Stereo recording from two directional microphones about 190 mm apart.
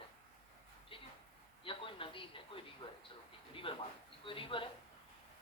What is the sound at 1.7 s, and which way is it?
Speech, 30° left (ahead or behind).